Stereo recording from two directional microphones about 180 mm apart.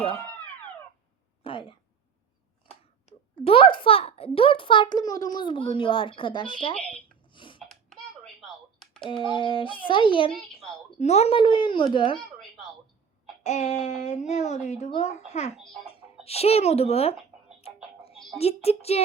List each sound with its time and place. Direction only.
0.2 s music: 10° left (ahead or behind)
1.5 s speech: 30° left (ahead or behind)
3.3 s a child's voice: 30° left (ahead or behind)
7.3 s a sound: 25° left (ahead or behind)
7.7 s typing: 5° left (ahead or behind)
9.2 s a child's voice: 30° left (ahead or behind)
13.4 s speech: 40° left (ahead or behind)
15.5 s a child's voice: centre (ahead or behind)
16.2 s speech: 35° left (ahead or behind)
18.3 s speech: 35° left (ahead or behind)